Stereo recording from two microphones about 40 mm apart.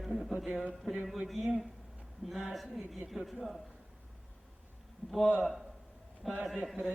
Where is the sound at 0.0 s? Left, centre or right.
Centre.